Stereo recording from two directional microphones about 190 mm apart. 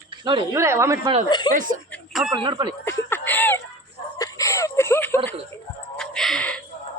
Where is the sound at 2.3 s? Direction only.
25° right (ahead or behind).